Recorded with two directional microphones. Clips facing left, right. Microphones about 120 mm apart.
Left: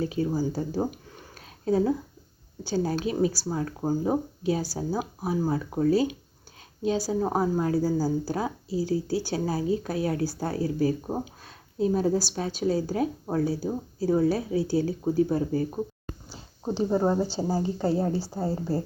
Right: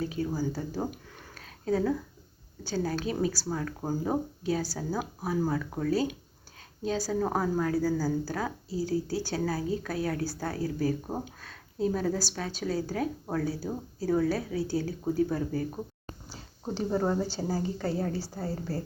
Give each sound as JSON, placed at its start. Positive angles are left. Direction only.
{"t": 0.0, "sound": "speech", "side_deg": 30}
{"t": 1.4, "sound": "a sound", "side_deg": 25}
{"t": 2.7, "sound": "speech", "side_deg": 25}
{"t": 3.8, "sound": "speech", "side_deg": 15}